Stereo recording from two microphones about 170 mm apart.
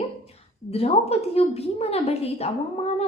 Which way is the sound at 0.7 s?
35° left (ahead or behind).